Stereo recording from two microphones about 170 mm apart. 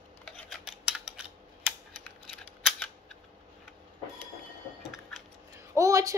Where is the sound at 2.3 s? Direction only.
5° left (ahead or behind).